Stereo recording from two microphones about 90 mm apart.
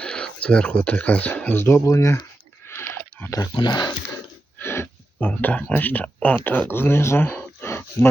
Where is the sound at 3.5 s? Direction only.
55° left (ahead or behind).